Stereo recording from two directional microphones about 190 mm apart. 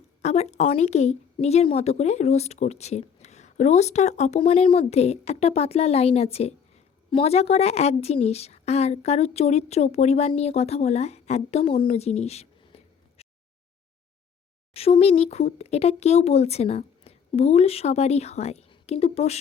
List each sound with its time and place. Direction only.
0.2 s a woman's voice: 35° left (ahead or behind)
14.7 s a woman's voice: 30° left (ahead or behind)